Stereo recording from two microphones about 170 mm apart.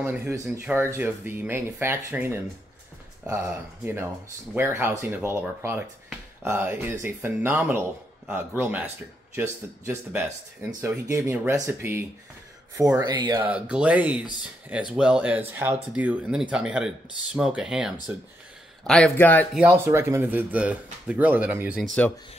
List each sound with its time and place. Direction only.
0.0 s speech: 10° right (ahead or behind)
13.4 s a man's voice: 5° right (ahead or behind); by 19.4 s 10° left (ahead or behind)
19.5 s speech: 10° right (ahead or behind)